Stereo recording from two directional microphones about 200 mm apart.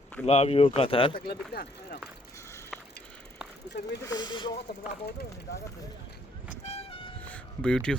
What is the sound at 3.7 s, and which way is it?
Speech, 55° left (ahead or behind).